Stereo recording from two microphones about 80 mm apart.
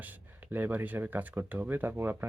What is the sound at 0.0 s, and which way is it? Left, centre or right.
Speech, right.